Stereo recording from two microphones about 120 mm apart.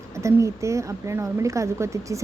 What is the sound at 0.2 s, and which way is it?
Speech, 25° right (ahead or behind).